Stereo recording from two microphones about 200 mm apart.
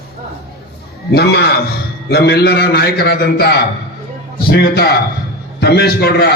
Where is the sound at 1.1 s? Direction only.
55° left (ahead or behind).